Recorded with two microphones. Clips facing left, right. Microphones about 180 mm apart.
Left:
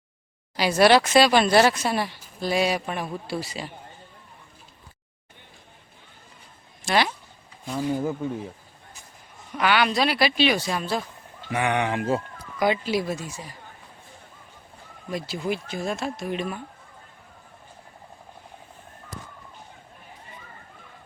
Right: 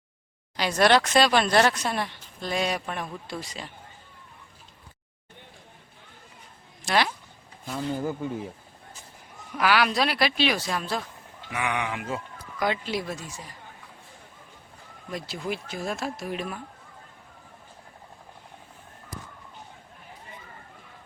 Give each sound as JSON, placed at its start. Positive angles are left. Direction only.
{"t": 0.5, "sound": "speech", "side_deg": 5}
{"t": 6.8, "sound": "speech", "side_deg": 0}
{"t": 7.8, "sound": "speech", "side_deg": 10}
{"t": 9.6, "sound": "speech", "side_deg": 0}
{"t": 11.5, "sound": "speech", "side_deg": 35}
{"t": 12.5, "sound": "speech", "side_deg": 10}
{"t": 15.1, "sound": "speech", "side_deg": 0}